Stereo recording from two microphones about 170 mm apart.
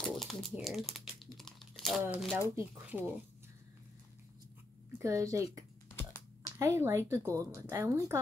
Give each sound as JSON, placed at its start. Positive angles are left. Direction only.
{"t": 0.0, "sound": "a sound", "side_deg": 0}
{"t": 1.2, "sound": "crumpling", "side_deg": 0}
{"t": 2.5, "sound": "speech", "side_deg": -10}
{"t": 4.9, "sound": "a woman's voice", "side_deg": -20}
{"t": 5.9, "sound": "typing", "side_deg": 15}
{"t": 6.6, "sound": "speech", "side_deg": -15}